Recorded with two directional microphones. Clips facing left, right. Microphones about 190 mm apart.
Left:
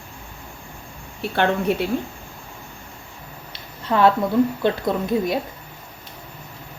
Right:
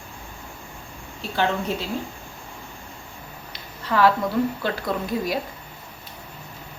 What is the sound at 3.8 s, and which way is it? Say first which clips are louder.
Speech: left 2 dB; 25° left (ahead or behind).